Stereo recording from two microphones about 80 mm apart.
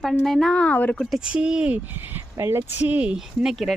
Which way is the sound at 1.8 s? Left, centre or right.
Right.